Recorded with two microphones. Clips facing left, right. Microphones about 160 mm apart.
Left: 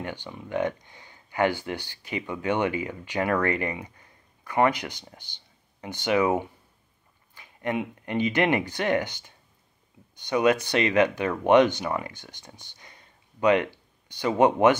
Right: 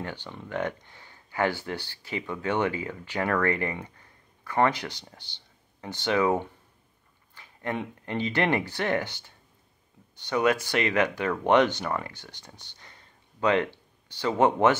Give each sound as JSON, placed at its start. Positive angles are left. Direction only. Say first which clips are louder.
{"t": 0.0, "sound": "speech", "louder": "left 1 dB", "side_deg": 15}